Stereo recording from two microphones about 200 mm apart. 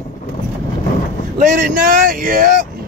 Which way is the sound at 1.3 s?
40° right (ahead or behind).